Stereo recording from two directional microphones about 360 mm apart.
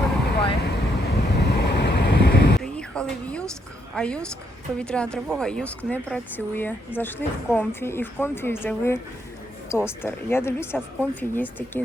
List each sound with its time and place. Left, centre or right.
0.6 s wind: left
2.6 s a sound: centre
3.9 s speech: centre